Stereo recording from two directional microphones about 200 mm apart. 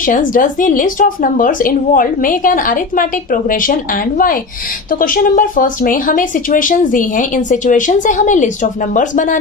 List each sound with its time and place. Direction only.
0.0 s a woman's voice: 40° left (ahead or behind)